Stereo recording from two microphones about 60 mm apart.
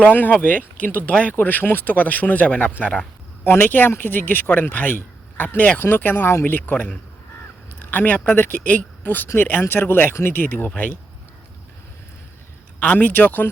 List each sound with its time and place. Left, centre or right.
0.3 s speech: left
3.4 s speech: left
5.5 s speech: left
13.0 s speech: left